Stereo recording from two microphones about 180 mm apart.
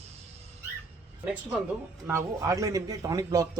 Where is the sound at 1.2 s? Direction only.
5° right (ahead or behind).